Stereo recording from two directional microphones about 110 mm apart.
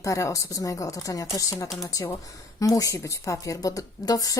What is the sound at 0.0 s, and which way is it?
A woman's voice, 30° left (ahead or behind).